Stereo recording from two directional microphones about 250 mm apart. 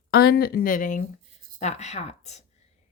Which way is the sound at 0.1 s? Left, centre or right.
Left.